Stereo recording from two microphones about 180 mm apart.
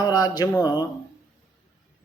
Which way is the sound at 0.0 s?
20° left (ahead or behind).